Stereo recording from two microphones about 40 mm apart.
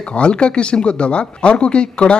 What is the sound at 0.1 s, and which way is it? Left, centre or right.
Speech, left.